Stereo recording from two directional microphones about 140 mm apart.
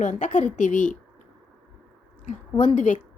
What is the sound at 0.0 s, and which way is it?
Speech, 65° left (ahead or behind).